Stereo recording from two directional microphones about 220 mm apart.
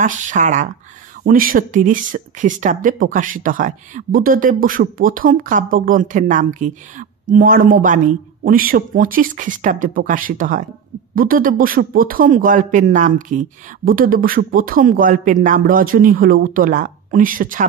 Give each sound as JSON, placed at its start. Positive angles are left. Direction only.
{"t": 0.0, "sound": "speech", "side_deg": -35}